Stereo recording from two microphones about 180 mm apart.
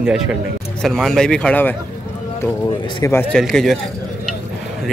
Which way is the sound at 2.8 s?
25° left (ahead or behind).